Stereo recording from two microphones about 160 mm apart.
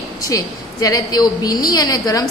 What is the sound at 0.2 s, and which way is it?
A woman's voice, 20° left (ahead or behind).